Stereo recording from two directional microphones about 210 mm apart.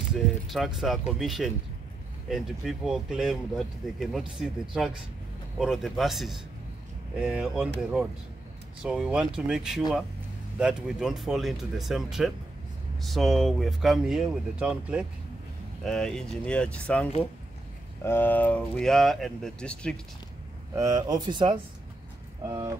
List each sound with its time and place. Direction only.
0.1 s speech: centre (ahead or behind)
8.8 s speech: 5° right (ahead or behind)
20.7 s speech: 15° right (ahead or behind)